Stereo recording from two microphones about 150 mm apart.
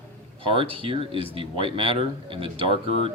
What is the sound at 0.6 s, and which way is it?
Speech, 35° right (ahead or behind).